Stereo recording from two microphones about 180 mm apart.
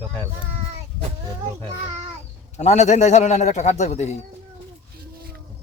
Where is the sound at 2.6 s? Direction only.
40° left (ahead or behind).